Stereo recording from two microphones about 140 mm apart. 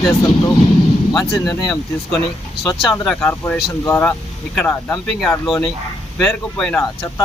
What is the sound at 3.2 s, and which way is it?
Speech, 15° left (ahead or behind).